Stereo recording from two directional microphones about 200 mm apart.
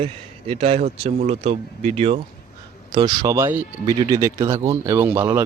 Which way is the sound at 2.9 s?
20° right (ahead or behind).